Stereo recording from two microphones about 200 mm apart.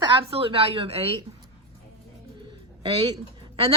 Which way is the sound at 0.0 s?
25° right (ahead or behind).